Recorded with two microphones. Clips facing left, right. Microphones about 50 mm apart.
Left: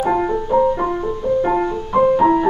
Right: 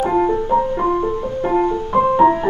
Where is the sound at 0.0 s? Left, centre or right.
Centre.